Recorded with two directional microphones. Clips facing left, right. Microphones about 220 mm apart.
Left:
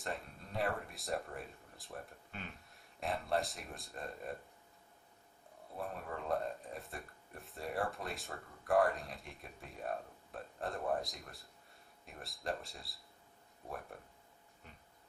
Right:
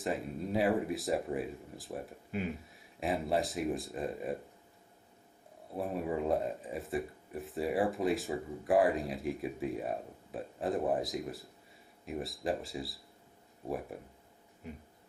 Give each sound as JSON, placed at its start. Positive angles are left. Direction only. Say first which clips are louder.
{"t": 0.0, "sound": "speech", "louder": "right 9 dB", "side_deg": 0}
{"t": 5.8, "sound": "speech", "louder": "right 10 dB", "side_deg": -5}